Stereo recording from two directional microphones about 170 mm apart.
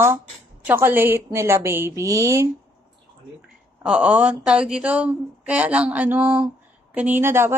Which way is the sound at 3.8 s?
5° right (ahead or behind).